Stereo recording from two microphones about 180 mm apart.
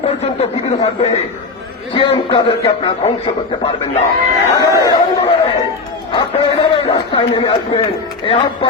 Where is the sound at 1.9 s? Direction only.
25° left (ahead or behind).